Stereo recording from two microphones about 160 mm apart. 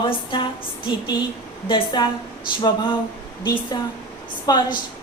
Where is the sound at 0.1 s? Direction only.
30° left (ahead or behind).